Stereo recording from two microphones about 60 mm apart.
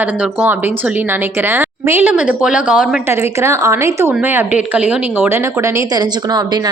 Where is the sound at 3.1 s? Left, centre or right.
Right.